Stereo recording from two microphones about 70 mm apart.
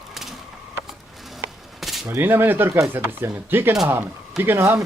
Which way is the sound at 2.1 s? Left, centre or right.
Right.